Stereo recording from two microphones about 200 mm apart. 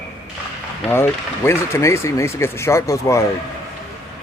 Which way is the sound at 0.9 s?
10° left (ahead or behind).